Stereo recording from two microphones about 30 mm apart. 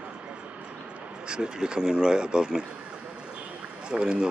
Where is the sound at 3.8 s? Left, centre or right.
Right.